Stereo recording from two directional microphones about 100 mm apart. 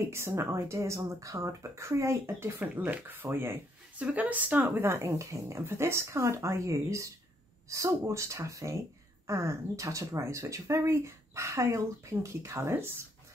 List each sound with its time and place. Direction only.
0.0 s speech: 25° right (ahead or behind)
2.7 s speech: 15° right (ahead or behind)